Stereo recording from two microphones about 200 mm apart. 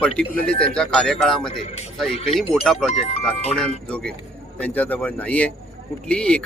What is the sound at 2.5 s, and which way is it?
Speech, centre (ahead or behind).